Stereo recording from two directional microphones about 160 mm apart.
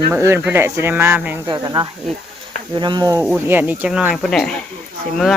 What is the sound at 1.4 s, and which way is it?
Insect, 25° right (ahead or behind).